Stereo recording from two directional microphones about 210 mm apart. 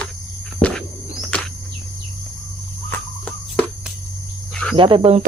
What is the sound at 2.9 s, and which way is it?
Cricket, 5° left (ahead or behind).